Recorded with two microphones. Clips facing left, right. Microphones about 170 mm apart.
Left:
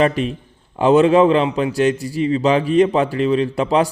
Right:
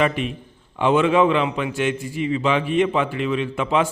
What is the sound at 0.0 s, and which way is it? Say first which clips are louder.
A man's voice: left 4 dB; 35° left (ahead or behind).